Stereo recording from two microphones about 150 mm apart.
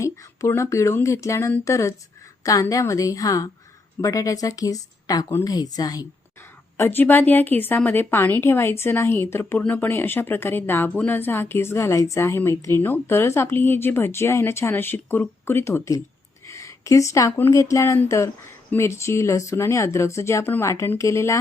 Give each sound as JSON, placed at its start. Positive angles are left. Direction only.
{"t": 0.0, "sound": "speech", "side_deg": 20}
{"t": 6.7, "sound": "speech", "side_deg": 15}